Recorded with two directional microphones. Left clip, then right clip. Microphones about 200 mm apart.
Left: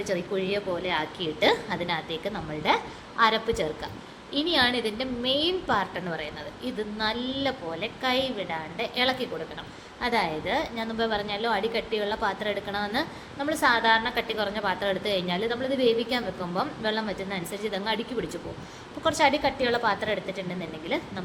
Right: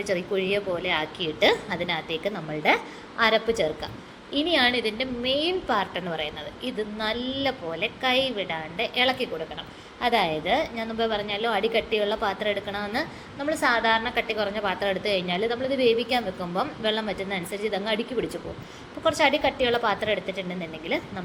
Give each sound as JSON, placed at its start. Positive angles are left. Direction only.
{"t": 0.0, "sound": "a woman's voice", "side_deg": -5}